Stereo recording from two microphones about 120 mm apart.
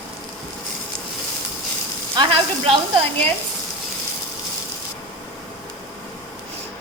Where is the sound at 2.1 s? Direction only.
45° right (ahead or behind).